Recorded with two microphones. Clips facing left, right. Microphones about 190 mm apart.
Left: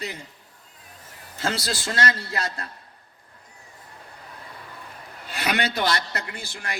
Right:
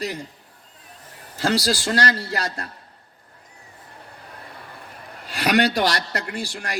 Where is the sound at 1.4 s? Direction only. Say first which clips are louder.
Right 6 dB; 40° right (ahead or behind).